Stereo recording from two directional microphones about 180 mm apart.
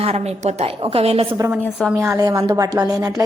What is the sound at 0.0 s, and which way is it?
A woman's voice, 35° right (ahead or behind).